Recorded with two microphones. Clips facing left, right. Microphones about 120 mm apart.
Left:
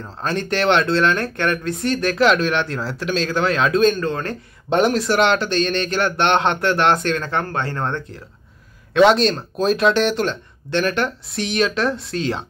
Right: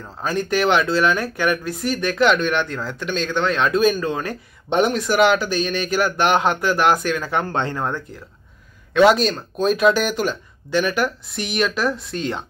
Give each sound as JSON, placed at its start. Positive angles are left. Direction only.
{"t": 0.2, "sound": "speech", "side_deg": -5}
{"t": 4.6, "sound": "speech", "side_deg": 0}
{"t": 7.7, "sound": "speech", "side_deg": -5}